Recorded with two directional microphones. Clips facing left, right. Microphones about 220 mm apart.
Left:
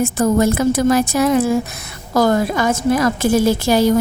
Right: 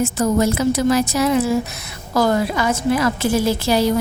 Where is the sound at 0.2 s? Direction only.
55° left (ahead or behind).